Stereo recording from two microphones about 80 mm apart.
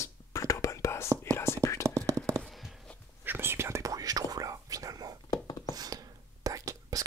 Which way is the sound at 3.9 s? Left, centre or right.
Right.